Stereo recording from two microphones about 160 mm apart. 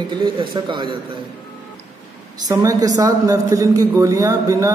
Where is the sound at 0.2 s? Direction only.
30° right (ahead or behind).